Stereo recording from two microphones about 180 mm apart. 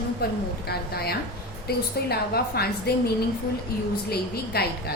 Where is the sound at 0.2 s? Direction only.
60° left (ahead or behind).